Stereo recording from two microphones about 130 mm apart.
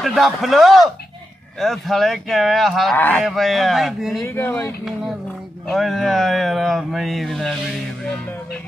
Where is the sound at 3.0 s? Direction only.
15° left (ahead or behind).